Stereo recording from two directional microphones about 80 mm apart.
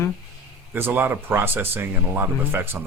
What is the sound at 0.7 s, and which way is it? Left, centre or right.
Speech, right.